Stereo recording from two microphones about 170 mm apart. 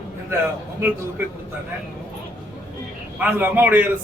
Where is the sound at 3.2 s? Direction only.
10° right (ahead or behind).